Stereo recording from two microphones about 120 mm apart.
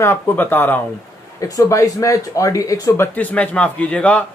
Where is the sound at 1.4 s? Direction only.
30° left (ahead or behind).